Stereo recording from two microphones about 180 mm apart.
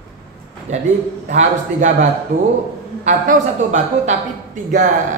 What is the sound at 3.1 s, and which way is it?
A woman's voice, 45° right (ahead or behind).